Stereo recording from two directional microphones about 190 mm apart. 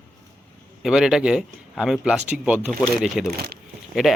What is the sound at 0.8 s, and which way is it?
Speech, centre (ahead or behind).